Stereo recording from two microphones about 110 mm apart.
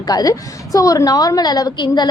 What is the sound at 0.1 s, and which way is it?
A woman's voice, 35° left (ahead or behind).